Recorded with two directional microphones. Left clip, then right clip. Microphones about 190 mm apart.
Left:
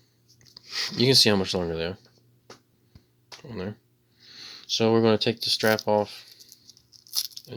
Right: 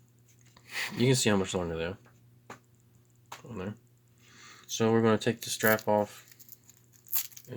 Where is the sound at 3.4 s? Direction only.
35° left (ahead or behind).